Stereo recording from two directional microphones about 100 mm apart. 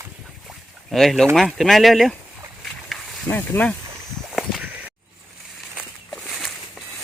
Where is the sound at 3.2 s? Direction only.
20° left (ahead or behind).